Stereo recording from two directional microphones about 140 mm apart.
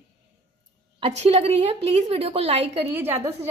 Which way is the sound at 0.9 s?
45° right (ahead or behind).